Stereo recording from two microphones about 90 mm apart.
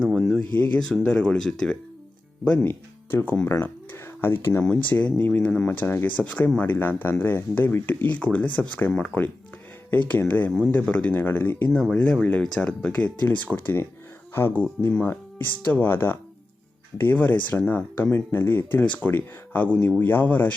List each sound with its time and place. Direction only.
0.0 s speech: 5° left (ahead or behind)
2.6 s speech: 25° left (ahead or behind)